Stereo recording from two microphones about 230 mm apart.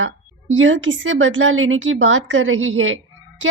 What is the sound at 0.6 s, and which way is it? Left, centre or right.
A woman's voice, right.